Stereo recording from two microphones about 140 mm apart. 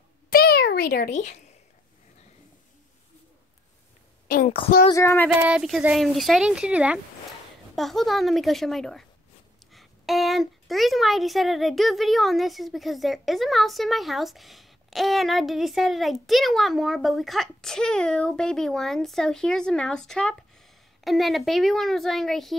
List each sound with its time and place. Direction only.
0.3 s a sound: 90° left; by 1.3 s 75° left (ahead or behind)
4.8 s speech: 20° left (ahead or behind)
5.4 s speech: 5° right (ahead or behind)
7.7 s a woman's voice: centre (ahead or behind)